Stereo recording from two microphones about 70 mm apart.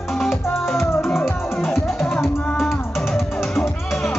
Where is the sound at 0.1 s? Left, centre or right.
Centre.